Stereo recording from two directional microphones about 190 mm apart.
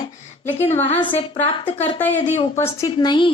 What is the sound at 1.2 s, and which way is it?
A woman's voice, 30° left (ahead or behind).